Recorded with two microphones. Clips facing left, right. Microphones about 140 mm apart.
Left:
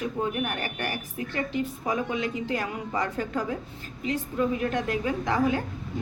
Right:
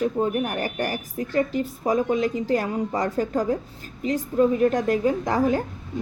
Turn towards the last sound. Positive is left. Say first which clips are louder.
# right 4 dB
turn(degrees=-40)  # may be behind; listen again after turning